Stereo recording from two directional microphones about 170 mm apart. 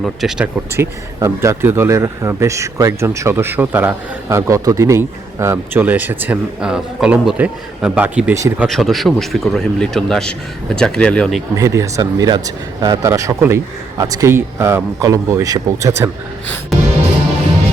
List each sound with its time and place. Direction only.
0.0 s a man's voice: centre (ahead or behind)
0.8 s speech: 15° right (ahead or behind)
8.6 s a man's voice: centre (ahead or behind)
11.5 s speech: 20° right (ahead or behind)